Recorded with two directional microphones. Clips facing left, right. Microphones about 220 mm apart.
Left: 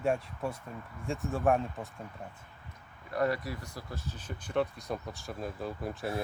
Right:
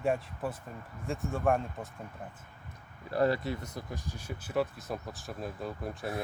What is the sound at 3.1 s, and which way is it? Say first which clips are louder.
Speech: right 3 dB; 30° right (ahead or behind).